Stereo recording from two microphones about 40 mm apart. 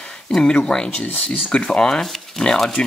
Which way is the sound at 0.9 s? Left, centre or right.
Left.